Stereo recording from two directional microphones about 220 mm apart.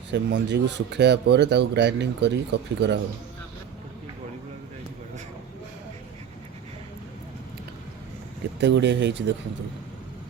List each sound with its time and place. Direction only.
0.1 s speech: 55° right (ahead or behind)
8.6 s speech: 55° right (ahead or behind)